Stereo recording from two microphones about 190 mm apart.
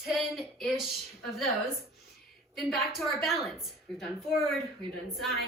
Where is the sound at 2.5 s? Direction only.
Centre (ahead or behind).